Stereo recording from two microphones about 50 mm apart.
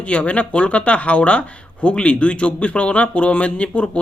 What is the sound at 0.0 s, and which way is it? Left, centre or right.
Speech, left.